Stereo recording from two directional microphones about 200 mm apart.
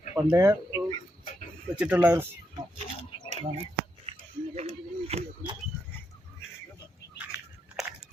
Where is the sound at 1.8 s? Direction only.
5° right (ahead or behind).